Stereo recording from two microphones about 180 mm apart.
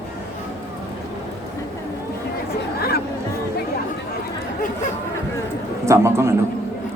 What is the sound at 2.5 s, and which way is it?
Chatter, 60° left (ahead or behind).